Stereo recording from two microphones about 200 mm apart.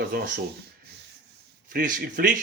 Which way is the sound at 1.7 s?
45° right (ahead or behind).